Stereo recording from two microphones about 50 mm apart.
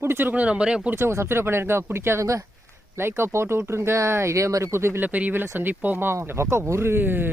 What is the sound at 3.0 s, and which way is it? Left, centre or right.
Speech, right.